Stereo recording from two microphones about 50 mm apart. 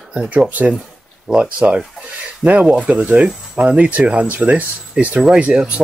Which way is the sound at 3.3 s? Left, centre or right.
Centre.